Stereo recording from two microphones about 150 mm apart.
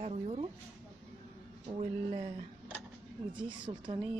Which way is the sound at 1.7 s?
40° right (ahead or behind).